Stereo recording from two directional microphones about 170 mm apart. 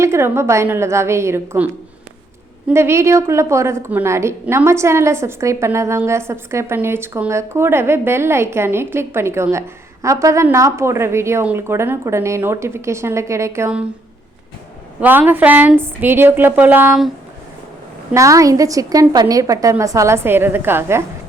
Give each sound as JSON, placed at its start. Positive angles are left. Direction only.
{"t": 0.0, "sound": "a woman's voice", "side_deg": -15}
{"t": 15.0, "sound": "a woman's voice", "side_deg": -10}
{"t": 18.1, "sound": "a woman's voice", "side_deg": -20}